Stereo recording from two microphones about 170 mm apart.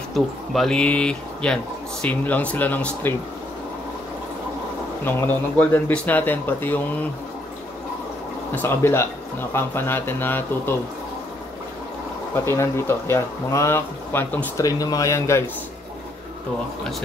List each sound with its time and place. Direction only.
0.1 s speech: centre (ahead or behind)
5.0 s speech: 10° left (ahead or behind)
8.5 s speech: 15° left (ahead or behind)
12.4 s speech: 15° left (ahead or behind)
14.6 s speech: 20° left (ahead or behind)